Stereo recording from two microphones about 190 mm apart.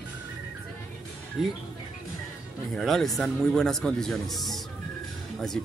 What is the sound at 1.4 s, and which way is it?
Speech, 5° right (ahead or behind).